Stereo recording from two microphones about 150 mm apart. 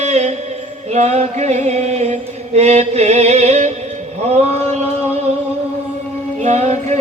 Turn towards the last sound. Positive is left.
turn(degrees=-50)  # may be behind; listen again after turning